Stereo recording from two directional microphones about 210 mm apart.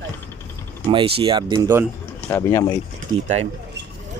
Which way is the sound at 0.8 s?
25° right (ahead or behind).